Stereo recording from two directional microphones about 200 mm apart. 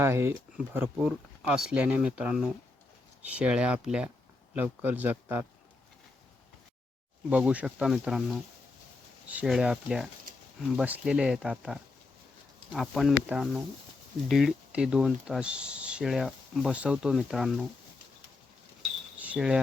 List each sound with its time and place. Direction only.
0.0 s speech: 10° right (ahead or behind)
7.3 s speech: 5° right (ahead or behind)
10.3 s a sound: 45° right (ahead or behind)
10.8 s speech: 5° right (ahead or behind)
18.8 s pulleys: 5° right (ahead or behind)